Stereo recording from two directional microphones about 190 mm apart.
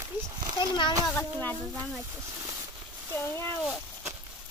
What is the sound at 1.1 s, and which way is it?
Speech, 10° left (ahead or behind).